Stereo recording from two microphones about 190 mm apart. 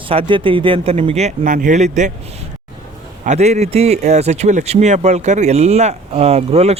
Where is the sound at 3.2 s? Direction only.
35° right (ahead or behind).